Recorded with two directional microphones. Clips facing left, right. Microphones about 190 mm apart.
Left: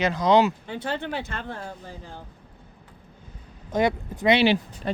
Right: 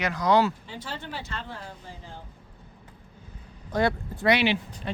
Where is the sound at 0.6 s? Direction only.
60° left (ahead or behind).